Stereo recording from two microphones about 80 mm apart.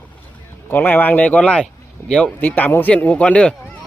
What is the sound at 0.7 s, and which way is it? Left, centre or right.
A man's voice, left.